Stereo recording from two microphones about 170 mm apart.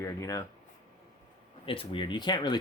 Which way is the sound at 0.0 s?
20° left (ahead or behind).